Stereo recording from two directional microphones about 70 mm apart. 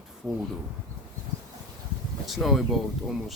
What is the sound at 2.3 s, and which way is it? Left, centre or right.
Speech, centre.